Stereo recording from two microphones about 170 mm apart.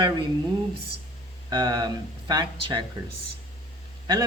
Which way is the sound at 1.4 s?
25° right (ahead or behind).